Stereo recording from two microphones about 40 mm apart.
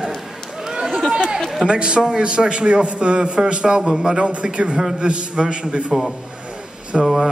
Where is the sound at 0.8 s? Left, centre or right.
Centre.